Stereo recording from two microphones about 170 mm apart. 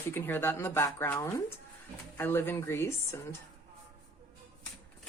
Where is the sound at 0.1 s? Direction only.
10° left (ahead or behind).